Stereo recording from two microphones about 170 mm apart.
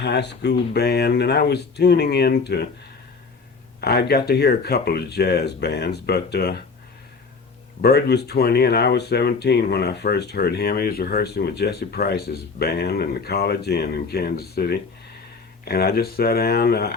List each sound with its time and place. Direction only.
0.0 s speech: 85° left
3.8 s speech: 70° left (ahead or behind)
7.8 s speech: 70° left (ahead or behind)